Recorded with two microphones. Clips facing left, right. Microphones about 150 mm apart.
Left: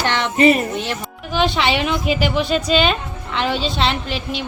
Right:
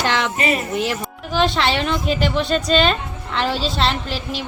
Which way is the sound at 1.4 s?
Centre (ahead or behind).